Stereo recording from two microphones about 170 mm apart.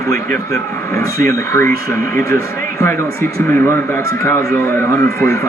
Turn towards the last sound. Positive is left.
turn(degrees=20)  # may be behind; listen again after turning